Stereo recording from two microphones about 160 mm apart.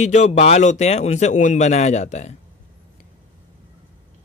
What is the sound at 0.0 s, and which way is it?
Speech, 45° left (ahead or behind).